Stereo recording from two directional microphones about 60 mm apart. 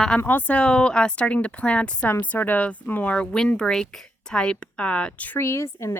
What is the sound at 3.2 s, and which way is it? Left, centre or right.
Speech, centre.